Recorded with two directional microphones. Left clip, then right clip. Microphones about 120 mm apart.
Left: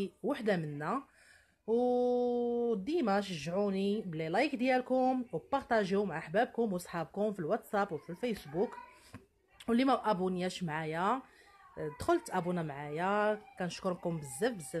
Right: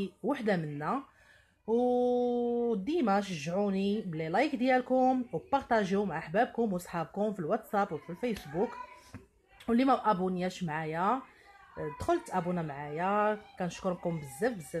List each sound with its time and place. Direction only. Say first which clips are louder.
0.0 s speech: right 2 dB; 15° left (ahead or behind)
9.7 s speech: right 3 dB; 25° left (ahead or behind)